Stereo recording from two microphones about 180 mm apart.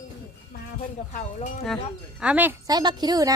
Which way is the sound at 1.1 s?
40° left (ahead or behind).